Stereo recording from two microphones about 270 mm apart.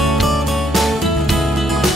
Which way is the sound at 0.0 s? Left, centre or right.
Centre.